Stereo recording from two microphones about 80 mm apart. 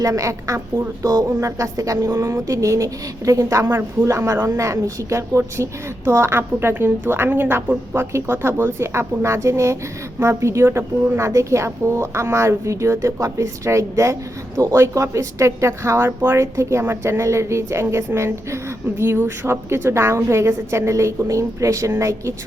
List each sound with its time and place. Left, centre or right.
0.0 s a woman's voice: right